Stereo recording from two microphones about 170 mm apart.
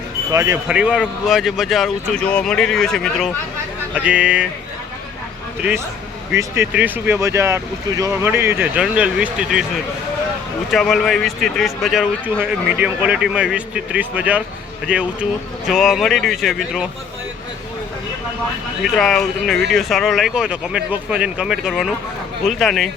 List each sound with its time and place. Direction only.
0.3 s speech: 20° right (ahead or behind)
0.7 s a man's voice: 5° right (ahead or behind)
6.3 s speech: 15° right (ahead or behind)
10.7 s a man's voice: centre (ahead or behind)
18.9 s a man's voice: centre (ahead or behind)